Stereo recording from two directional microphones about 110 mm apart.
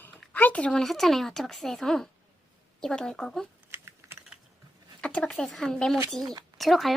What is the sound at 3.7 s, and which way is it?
Typing, 20° right (ahead or behind).